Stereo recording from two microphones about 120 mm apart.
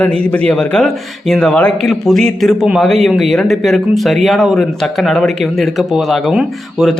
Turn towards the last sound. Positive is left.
turn(degrees=0)  # may be behind; listen again after turning